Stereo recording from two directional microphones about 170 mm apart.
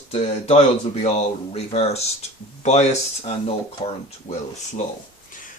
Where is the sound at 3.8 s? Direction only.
30° left (ahead or behind).